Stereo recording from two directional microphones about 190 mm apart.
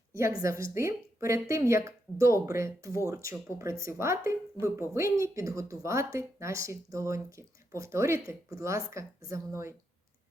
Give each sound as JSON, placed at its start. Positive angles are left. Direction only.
{"t": 0.2, "sound": "speech", "side_deg": -15}